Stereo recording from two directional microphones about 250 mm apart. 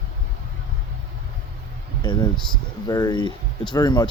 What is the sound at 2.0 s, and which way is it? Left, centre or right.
Speech, centre.